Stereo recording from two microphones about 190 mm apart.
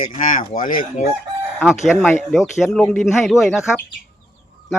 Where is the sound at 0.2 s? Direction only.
45° left (ahead or behind).